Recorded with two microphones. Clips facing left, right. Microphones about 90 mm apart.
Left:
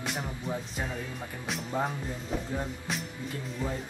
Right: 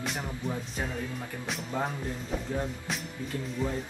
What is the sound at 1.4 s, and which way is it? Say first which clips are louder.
Bell: left 2 dB; centre (ahead or behind).